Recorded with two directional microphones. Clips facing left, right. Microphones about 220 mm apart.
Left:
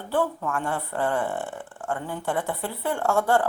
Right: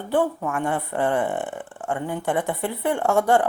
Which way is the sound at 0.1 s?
15° right (ahead or behind).